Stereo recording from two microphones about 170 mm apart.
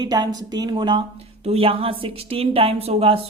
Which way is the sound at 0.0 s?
25° right (ahead or behind).